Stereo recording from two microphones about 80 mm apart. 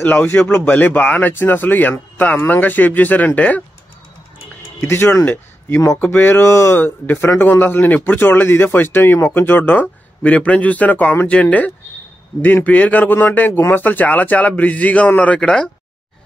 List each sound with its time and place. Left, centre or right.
0.0 s speech: left
4.7 s speech: left
5.2 s speech: centre
6.0 s speech: left
6.8 s speech: left
12.6 s speech: left